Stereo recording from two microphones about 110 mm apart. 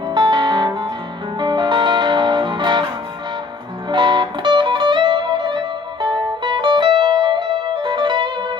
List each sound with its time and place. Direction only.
0.1 s music: 45° right (ahead or behind)
3.9 s music: 45° right (ahead or behind)